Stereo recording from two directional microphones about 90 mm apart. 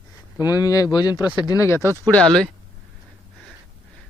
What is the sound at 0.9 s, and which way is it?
Speech, 60° left (ahead or behind).